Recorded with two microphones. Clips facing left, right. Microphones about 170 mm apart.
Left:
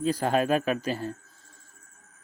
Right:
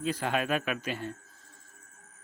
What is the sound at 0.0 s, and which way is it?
Speech, 40° left (ahead or behind).